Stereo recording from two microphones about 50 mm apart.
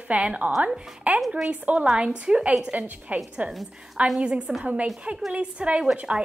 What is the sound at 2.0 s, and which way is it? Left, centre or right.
Speech, centre.